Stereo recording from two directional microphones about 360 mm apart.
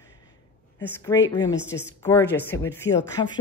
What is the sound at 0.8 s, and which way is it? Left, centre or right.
Speech, centre.